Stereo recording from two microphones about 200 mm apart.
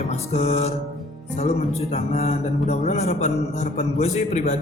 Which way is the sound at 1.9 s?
35° left (ahead or behind).